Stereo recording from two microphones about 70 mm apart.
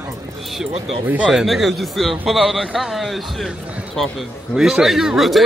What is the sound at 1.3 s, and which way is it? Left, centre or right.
A man's voice, centre.